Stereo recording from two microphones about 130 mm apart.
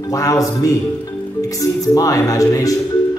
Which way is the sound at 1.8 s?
25° left (ahead or behind).